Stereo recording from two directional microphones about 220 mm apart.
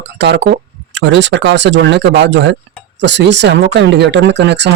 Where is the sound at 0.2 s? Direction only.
50° right (ahead or behind).